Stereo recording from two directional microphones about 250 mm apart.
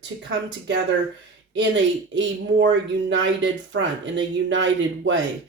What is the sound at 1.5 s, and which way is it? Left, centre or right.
Speech, right.